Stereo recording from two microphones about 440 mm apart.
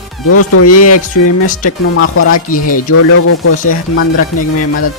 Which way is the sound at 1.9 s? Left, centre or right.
Left.